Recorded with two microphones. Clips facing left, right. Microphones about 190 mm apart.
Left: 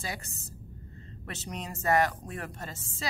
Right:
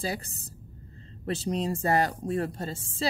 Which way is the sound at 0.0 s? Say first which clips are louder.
Right 6 dB; 35° right (ahead or behind).